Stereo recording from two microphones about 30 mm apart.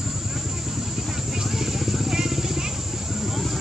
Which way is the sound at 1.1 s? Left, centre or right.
Centre.